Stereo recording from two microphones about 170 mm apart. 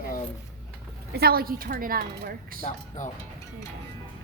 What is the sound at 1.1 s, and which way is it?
A woman's voice, 65° right (ahead or behind).